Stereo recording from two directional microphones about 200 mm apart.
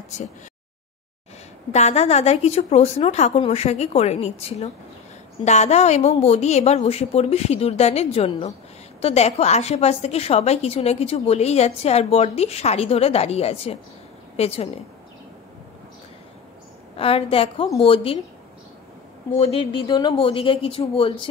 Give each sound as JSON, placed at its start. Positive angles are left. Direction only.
{"t": 1.7, "sound": "a woman's voice", "side_deg": 35}
{"t": 16.9, "sound": "speech", "side_deg": 30}
{"t": 19.3, "sound": "speech", "side_deg": 30}